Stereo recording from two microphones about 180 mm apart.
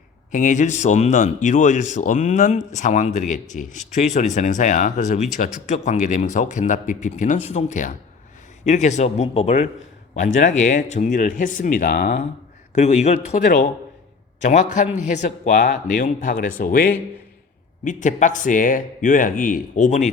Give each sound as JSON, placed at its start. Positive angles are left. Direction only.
{"t": 0.3, "sound": "speech", "side_deg": 45}
{"t": 12.7, "sound": "speech", "side_deg": 40}
{"t": 13.4, "sound": "speech", "side_deg": 50}